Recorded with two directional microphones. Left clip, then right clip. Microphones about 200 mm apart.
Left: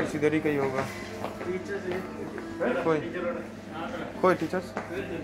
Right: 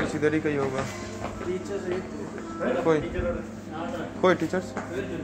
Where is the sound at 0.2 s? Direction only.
20° left (ahead or behind).